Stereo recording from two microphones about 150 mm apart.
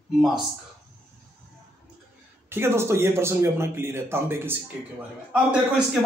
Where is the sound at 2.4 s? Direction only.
15° right (ahead or behind).